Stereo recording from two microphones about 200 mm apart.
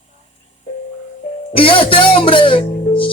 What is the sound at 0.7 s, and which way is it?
Music, 35° left (ahead or behind).